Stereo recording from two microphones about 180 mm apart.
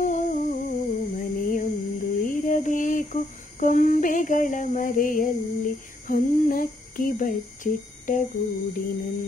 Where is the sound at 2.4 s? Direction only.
45° left (ahead or behind).